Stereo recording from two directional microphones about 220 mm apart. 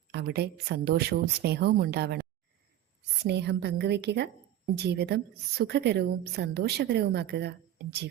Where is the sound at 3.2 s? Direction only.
50° right (ahead or behind).